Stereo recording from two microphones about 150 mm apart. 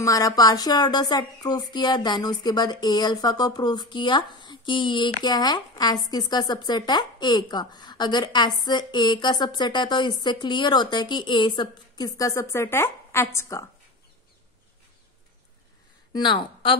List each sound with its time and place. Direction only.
0.0 s speech: 25° left (ahead or behind)
16.1 s a woman's voice: 30° left (ahead or behind)